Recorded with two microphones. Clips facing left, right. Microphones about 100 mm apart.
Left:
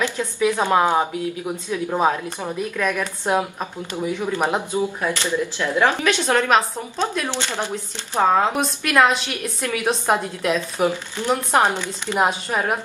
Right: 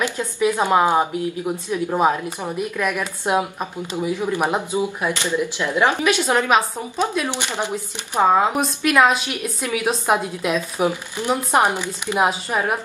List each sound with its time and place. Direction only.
0.0 s speech: 15° right (ahead or behind)
8.5 s speech: 5° right (ahead or behind)